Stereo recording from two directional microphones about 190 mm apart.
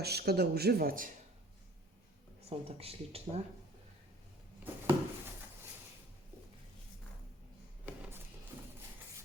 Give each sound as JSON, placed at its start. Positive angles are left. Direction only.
{"t": 0.0, "sound": "speech", "side_deg": -55}
{"t": 2.5, "sound": "speech", "side_deg": -30}
{"t": 4.6, "sound": "a sound", "side_deg": -10}
{"t": 7.9, "sound": "music", "side_deg": -5}